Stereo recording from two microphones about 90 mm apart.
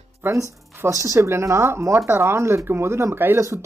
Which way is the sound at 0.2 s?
30° right (ahead or behind).